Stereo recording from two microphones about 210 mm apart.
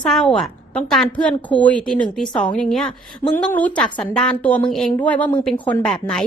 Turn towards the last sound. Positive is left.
turn(degrees=5)  # may be behind; listen again after turning